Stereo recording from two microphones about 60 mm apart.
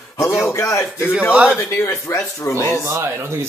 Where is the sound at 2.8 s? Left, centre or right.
Right.